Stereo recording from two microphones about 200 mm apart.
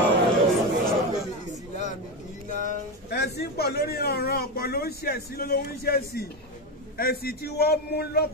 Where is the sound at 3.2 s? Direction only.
55° left (ahead or behind).